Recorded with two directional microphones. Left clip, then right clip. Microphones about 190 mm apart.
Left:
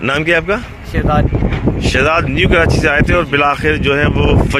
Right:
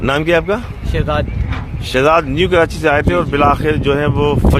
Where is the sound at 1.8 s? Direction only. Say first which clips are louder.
Right 2 dB; centre (ahead or behind).